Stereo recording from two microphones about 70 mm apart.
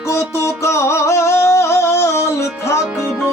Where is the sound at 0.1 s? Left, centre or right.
Left.